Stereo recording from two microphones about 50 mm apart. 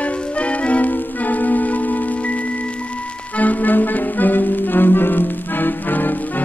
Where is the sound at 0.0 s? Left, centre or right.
Left.